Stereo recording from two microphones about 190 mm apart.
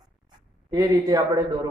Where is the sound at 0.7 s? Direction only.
20° right (ahead or behind).